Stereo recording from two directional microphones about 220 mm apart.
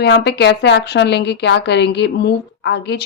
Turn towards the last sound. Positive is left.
turn(degrees=50)  # may be behind; listen again after turning